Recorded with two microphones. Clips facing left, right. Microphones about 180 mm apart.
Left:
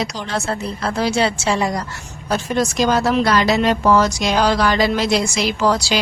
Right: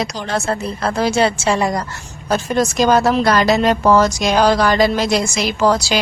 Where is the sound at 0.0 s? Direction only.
45° right (ahead or behind).